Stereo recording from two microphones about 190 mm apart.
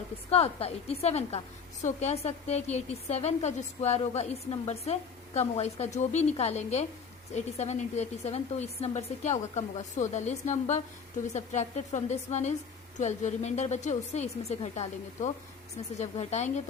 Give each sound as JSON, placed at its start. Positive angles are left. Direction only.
{"t": 0.3, "sound": "a woman's voice", "side_deg": 30}